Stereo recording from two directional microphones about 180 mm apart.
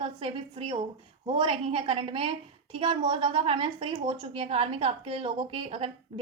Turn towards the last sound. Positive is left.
turn(degrees=-30)  # may be behind; listen again after turning